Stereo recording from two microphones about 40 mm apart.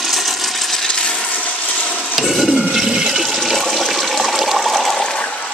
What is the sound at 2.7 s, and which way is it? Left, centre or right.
Toilet flush, centre.